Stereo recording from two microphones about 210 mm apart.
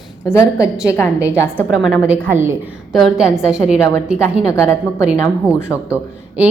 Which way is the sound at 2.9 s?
Centre (ahead or behind).